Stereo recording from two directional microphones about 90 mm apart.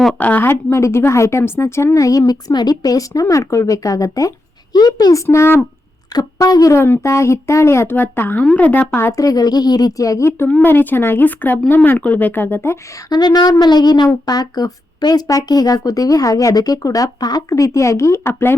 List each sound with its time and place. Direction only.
0.2 s a woman's voice: 15° left (ahead or behind)
0.5 s a woman's voice: 30° left (ahead or behind)
6.1 s a woman's voice: 40° left (ahead or behind)
6.7 s a child's voice: 25° left (ahead or behind)
9.1 s a woman's voice: 45° left (ahead or behind); by 12.8 s 25° left (ahead or behind)
13.1 s a woman's voice: 50° left (ahead or behind); by 18.5 s 25° left (ahead or behind)